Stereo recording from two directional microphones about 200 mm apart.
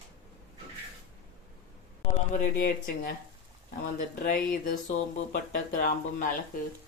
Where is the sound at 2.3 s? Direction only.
40° left (ahead or behind).